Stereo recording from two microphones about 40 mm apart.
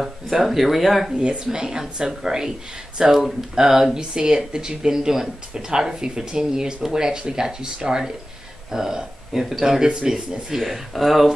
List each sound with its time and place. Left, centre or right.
0.3 s speech: centre
1.1 s speech: right
9.8 s speech: right
10.6 s speech: centre